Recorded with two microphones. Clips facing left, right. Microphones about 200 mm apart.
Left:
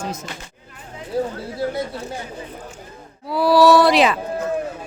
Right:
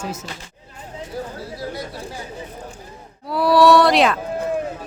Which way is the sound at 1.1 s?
25° left (ahead or behind).